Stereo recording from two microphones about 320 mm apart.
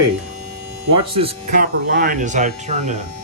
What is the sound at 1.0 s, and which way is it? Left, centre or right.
Speech, centre.